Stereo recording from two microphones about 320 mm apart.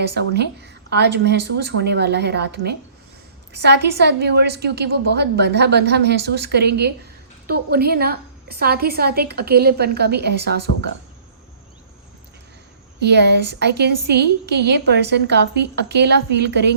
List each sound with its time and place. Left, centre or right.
0.0 s a woman's voice: right
13.0 s a woman's voice: right